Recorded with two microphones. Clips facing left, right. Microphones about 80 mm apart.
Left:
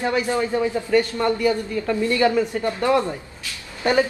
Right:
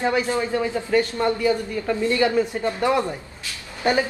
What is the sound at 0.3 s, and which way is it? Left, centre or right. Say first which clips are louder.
Speech: left 1 dB; centre.